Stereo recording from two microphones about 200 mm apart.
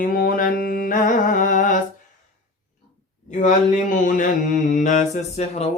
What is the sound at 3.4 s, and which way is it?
Mantra, 40° left (ahead or behind).